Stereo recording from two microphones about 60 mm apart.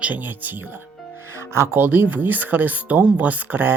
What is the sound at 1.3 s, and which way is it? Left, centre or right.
Music, right.